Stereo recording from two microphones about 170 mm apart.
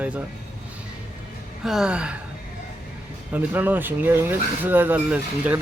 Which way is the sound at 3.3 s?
10° right (ahead or behind).